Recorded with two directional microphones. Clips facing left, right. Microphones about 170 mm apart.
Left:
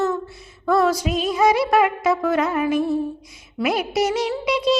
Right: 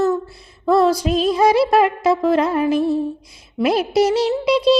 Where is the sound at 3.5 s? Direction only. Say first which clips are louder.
Right 5 dB; 30° right (ahead or behind).